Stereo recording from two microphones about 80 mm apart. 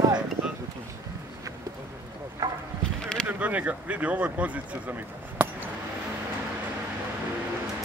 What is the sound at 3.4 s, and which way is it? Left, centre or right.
Speech, centre.